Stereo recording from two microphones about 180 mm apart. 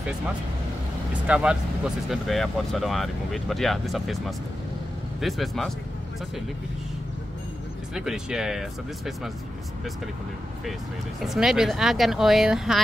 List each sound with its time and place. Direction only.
1.2 s speech: 5° right (ahead or behind)
5.2 s speech: centre (ahead or behind)
7.9 s speech: 5° right (ahead or behind)
11.1 s speech: centre (ahead or behind)